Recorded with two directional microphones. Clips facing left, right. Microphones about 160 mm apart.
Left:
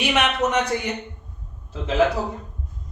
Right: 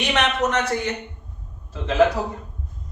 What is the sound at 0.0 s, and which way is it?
Speech, 10° left (ahead or behind).